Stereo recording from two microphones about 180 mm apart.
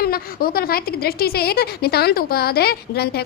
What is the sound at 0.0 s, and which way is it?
A woman's voice, 55° left (ahead or behind).